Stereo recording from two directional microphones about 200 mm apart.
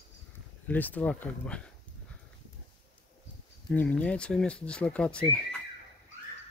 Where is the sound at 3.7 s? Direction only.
5° left (ahead or behind).